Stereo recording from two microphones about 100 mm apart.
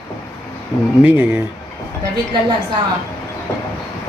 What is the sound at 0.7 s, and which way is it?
Speech, 45° left (ahead or behind).